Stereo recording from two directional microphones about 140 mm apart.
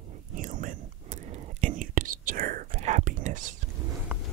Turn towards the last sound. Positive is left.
turn(degrees=-15)  # may be behind; listen again after turning